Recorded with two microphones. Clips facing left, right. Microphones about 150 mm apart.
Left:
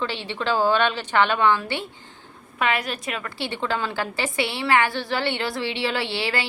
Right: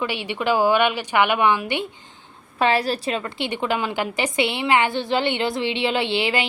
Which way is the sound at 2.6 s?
30° right (ahead or behind).